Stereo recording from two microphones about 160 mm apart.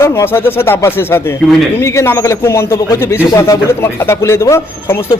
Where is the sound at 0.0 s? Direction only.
15° left (ahead or behind).